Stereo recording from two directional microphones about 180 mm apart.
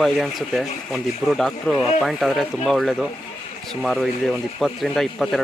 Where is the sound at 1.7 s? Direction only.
35° left (ahead or behind).